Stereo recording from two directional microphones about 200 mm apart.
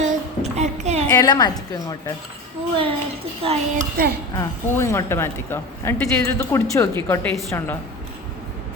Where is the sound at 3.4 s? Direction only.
30° right (ahead or behind).